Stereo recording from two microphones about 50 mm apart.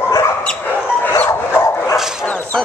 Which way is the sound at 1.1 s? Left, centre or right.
Left.